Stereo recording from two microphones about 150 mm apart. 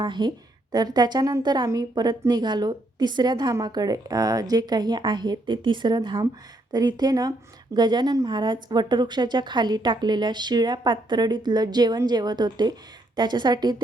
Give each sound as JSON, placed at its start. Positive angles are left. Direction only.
{"t": 0.0, "sound": "a woman's voice", "side_deg": -30}